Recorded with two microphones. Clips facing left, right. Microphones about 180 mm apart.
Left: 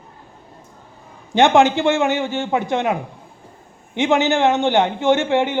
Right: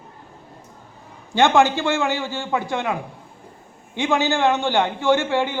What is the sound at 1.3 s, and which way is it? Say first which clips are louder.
A man's voice: left 3 dB; 20° left (ahead or behind).